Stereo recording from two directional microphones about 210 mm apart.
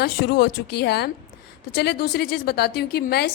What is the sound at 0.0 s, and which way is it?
Speech, 50° left (ahead or behind).